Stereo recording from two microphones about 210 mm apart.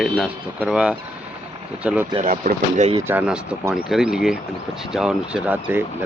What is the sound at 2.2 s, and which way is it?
Speech, 40° right (ahead or behind).